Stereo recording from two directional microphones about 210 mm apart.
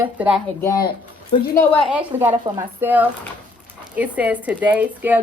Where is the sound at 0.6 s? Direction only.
15° left (ahead or behind).